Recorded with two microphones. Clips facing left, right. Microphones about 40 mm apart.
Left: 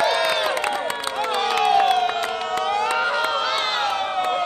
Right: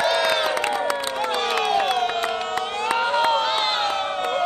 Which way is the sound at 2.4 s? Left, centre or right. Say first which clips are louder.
Left 1 dB; right.